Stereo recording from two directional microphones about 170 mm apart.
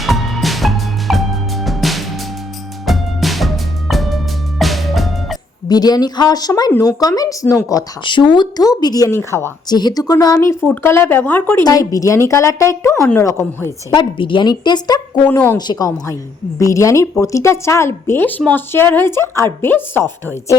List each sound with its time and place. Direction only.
0.0 s music: centre (ahead or behind)
5.6 s a woman's voice: 25° left (ahead or behind)
13.9 s a woman's voice: 30° left (ahead or behind)
15.3 s speech: 10° left (ahead or behind)
15.5 s a woman's voice: 25° left (ahead or behind)